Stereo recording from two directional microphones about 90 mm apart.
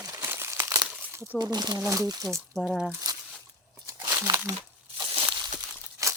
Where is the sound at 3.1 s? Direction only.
45° right (ahead or behind).